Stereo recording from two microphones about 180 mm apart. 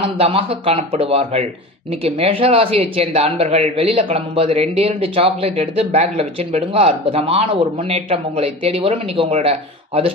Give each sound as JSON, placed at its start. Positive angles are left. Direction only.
{"t": 0.0, "sound": "speech", "side_deg": -30}